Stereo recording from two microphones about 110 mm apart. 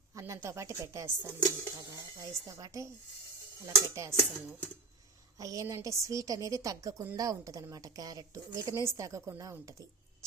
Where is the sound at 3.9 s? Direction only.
30° right (ahead or behind).